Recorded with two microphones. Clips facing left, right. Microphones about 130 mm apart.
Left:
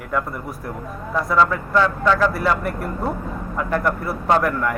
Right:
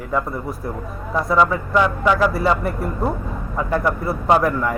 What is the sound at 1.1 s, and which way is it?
Speech, 15° right (ahead or behind).